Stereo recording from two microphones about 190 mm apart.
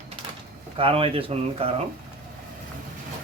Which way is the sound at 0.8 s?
30° right (ahead or behind).